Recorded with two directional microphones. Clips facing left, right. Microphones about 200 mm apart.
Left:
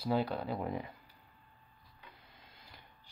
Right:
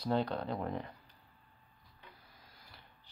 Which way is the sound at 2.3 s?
25° left (ahead or behind).